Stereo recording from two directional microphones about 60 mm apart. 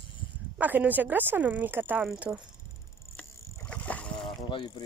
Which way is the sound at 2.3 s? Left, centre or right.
Right.